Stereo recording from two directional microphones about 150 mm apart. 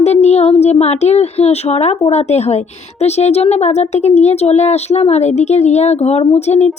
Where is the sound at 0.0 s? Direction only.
45° left (ahead or behind).